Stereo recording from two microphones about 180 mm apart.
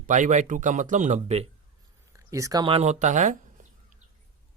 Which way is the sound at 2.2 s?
15° right (ahead or behind).